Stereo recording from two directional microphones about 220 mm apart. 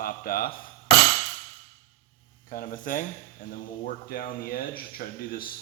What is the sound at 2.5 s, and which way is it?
A man's voice, 35° left (ahead or behind).